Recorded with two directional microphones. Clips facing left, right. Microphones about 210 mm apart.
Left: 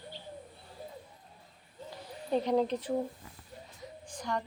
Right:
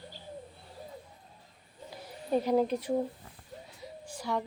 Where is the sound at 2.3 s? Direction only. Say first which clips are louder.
Right 2 dB; 5° right (ahead or behind).